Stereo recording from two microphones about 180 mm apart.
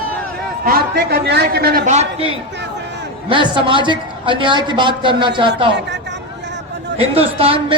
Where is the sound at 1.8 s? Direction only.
40° right (ahead or behind).